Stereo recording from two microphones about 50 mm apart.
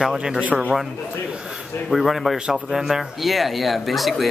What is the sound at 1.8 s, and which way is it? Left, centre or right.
Speech, centre.